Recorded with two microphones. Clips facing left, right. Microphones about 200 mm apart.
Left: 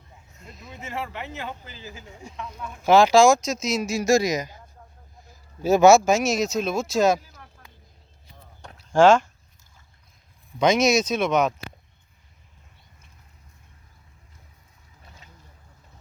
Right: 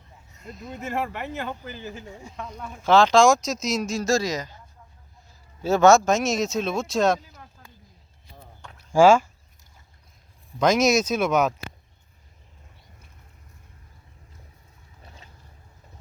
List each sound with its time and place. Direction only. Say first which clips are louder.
0.4 s speech: right 6 dB; centre (ahead or behind)
0.7 s speech: right 4 dB; 50° right (ahead or behind)
2.3 s speech: left 1 dB; 45° right (ahead or behind)
2.8 s speech: left 1 dB; 10° left (ahead or behind)
5.3 s a sound: left 3 dB; 15° left (ahead or behind)
6.1 s speech: left 1 dB; centre (ahead or behind)
8.9 s speech: even; 5° right (ahead or behind)
10.6 s speech: even; centre (ahead or behind)